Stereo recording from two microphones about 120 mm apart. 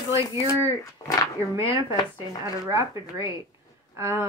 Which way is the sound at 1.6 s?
20° right (ahead or behind).